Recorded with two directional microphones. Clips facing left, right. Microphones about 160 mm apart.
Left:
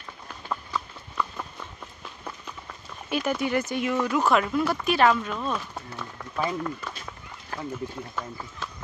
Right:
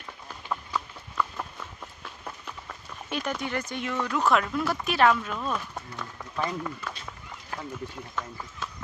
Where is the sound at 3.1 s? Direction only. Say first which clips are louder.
Left 5 dB; 5° left (ahead or behind).